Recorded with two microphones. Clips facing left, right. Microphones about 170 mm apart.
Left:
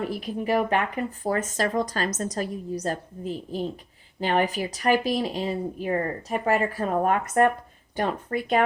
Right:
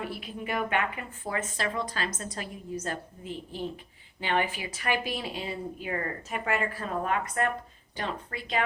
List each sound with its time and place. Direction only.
0.0 s speech: 40° left (ahead or behind)
6.8 s speech: 50° left (ahead or behind)